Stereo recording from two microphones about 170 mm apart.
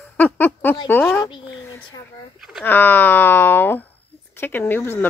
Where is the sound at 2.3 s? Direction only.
Centre (ahead or behind).